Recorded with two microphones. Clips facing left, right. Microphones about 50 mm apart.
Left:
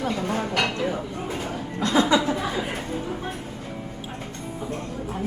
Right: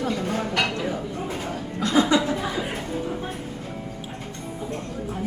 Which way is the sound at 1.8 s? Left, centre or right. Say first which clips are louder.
Even; right.